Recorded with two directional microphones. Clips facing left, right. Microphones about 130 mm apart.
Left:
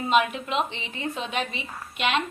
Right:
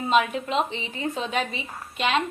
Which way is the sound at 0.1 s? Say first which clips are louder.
Right 1 dB; 35° right (ahead or behind).